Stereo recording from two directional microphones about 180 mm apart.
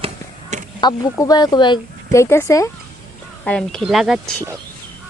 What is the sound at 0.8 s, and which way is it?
Speech, 20° left (ahead or behind).